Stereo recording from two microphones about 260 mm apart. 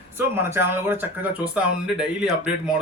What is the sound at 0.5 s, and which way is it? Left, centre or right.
Speech, centre.